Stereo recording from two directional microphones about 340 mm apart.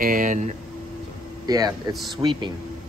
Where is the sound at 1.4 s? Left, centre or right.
Centre.